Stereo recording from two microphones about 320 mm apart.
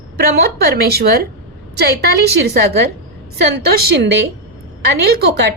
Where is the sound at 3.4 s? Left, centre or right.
Right.